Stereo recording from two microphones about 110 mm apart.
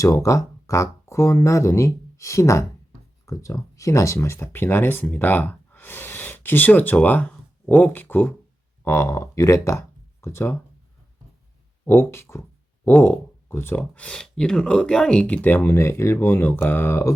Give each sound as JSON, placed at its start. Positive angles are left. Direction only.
{"t": 0.0, "sound": "speech", "side_deg": 30}
{"t": 11.9, "sound": "a sound", "side_deg": 25}
{"t": 13.0, "sound": "speech", "side_deg": 20}